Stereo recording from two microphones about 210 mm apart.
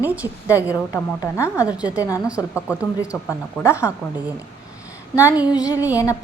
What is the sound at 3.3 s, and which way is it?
Speech, 15° left (ahead or behind).